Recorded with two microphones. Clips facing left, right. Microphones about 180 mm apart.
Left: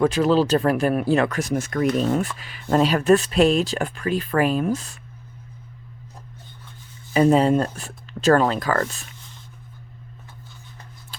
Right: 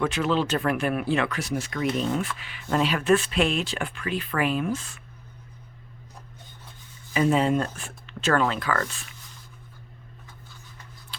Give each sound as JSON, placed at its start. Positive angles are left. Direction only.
{"t": 0.0, "sound": "speech", "side_deg": 35}
{"t": 7.1, "sound": "speech", "side_deg": 35}
{"t": 11.1, "sound": "scissors", "side_deg": 45}